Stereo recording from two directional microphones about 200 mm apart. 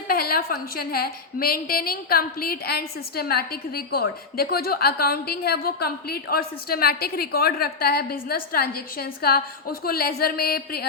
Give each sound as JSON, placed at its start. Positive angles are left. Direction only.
{"t": 0.1, "sound": "a woman's voice", "side_deg": 50}